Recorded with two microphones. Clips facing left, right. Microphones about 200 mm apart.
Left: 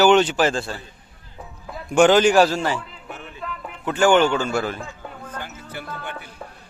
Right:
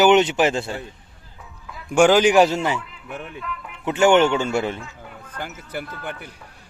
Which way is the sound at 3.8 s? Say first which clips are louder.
Right 1 dB; 20° right (ahead or behind).